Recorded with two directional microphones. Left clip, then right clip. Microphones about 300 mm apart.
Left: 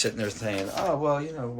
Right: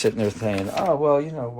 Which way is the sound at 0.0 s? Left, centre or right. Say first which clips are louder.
Right 6 dB; centre.